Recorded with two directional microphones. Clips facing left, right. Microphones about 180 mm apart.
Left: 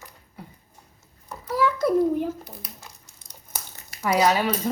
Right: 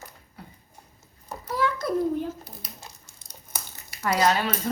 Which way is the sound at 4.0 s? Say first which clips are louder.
Left 2 dB; 10° left (ahead or behind).